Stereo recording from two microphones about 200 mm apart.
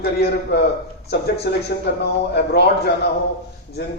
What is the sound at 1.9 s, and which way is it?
A man's voice, 55° left (ahead or behind).